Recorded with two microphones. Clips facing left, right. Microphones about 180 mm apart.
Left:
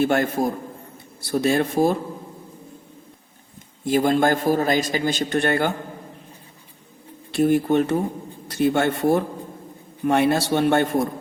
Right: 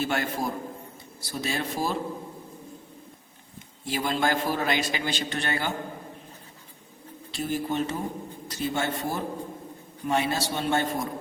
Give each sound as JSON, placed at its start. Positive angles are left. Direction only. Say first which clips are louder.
{"t": 0.0, "sound": "a man's voice", "louder": "left 8 dB", "side_deg": 50}
{"t": 3.8, "sound": "a man's voice", "louder": "left 8 dB", "side_deg": 50}
{"t": 7.3, "sound": "a man's voice", "louder": "left 11 dB", "side_deg": 60}